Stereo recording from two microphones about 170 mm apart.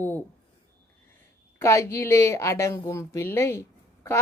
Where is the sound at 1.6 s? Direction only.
15° left (ahead or behind).